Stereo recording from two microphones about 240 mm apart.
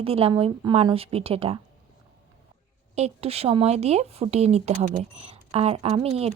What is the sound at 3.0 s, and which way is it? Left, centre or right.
A woman's voice, right.